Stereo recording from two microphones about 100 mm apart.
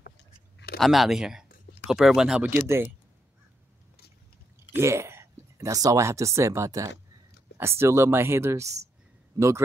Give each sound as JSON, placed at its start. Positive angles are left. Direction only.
{"t": 0.7, "sound": "speech", "side_deg": 0}
{"t": 4.7, "sound": "a man's voice", "side_deg": -25}